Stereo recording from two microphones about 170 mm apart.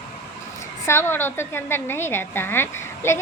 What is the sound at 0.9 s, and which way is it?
A woman's voice, 15° left (ahead or behind).